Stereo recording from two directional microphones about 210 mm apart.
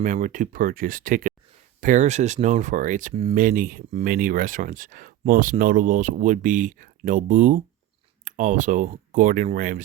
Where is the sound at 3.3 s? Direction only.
40° right (ahead or behind).